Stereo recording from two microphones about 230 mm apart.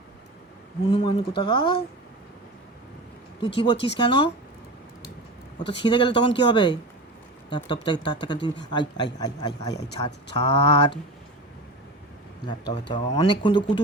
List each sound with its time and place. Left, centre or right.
0.9 s speech: left
3.6 s speech: left
5.5 s a man's voice: left
10.5 s speech: left
12.5 s speech: centre